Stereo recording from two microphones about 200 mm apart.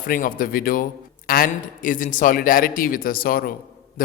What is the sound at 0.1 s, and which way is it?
A man's voice, 45° left (ahead or behind).